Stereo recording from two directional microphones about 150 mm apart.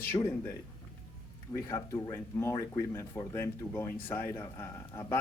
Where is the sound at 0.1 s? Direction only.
20° left (ahead or behind).